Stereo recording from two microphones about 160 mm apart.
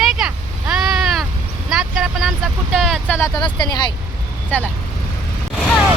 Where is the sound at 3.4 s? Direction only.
25° left (ahead or behind).